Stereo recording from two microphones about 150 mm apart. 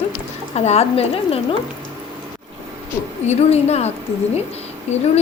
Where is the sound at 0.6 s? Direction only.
45° left (ahead or behind).